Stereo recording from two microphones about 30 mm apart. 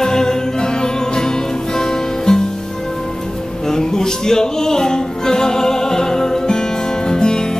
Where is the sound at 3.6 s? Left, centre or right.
Centre.